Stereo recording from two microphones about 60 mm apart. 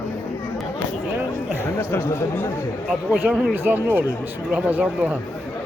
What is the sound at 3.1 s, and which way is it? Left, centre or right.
Speech, right.